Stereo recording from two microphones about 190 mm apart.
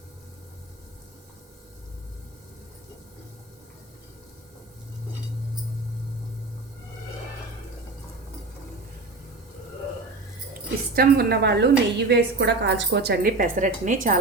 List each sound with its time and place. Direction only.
10.9 s a woman's voice: 55° right (ahead or behind)